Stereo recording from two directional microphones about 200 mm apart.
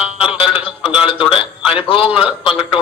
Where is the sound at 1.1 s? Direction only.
25° left (ahead or behind).